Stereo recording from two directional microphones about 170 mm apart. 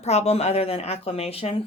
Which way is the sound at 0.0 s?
40° left (ahead or behind).